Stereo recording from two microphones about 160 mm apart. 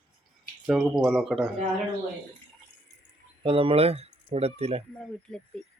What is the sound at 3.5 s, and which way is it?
Speech, 35° right (ahead or behind).